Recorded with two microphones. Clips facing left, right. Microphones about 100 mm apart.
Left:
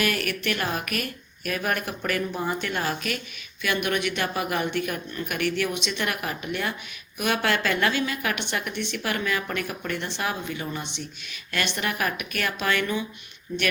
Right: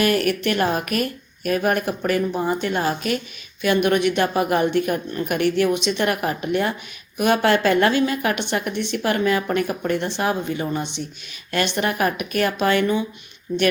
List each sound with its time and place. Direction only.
0.0 s a woman's voice: 35° right (ahead or behind)